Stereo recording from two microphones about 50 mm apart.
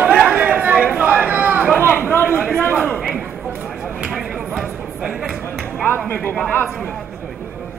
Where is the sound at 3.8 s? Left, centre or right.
Centre.